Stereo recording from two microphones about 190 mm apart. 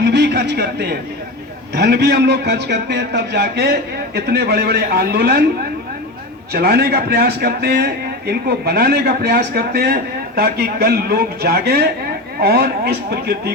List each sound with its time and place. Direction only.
0.0 s a sound: 65° right (ahead or behind)
1.7 s a man's voice: 55° right (ahead or behind)
6.5 s a man's voice: 55° right (ahead or behind)